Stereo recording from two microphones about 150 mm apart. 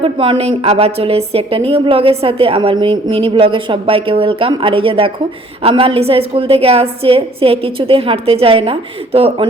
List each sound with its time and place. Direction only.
0.0 s a woman's voice: 35° right (ahead or behind)